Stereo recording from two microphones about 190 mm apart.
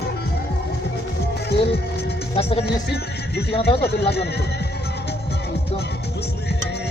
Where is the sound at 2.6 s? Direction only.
60° left (ahead or behind).